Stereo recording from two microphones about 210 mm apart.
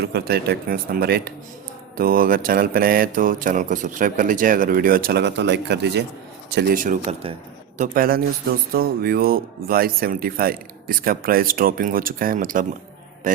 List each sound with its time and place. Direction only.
0.0 s a man's voice: 50° right (ahead or behind)
13.2 s mantra: 40° right (ahead or behind)